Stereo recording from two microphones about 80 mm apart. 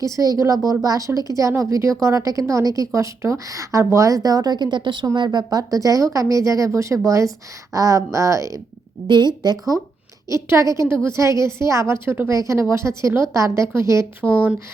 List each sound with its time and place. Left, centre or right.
0.0 s speech: right
5.1 s speech: right
9.0 s speech: right
10.5 s speech: right
12.3 s speech: right
14.2 s speech: right